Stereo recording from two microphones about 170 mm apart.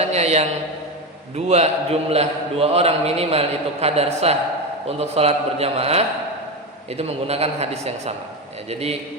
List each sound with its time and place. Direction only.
0.0 s a man's voice: 40° right (ahead or behind)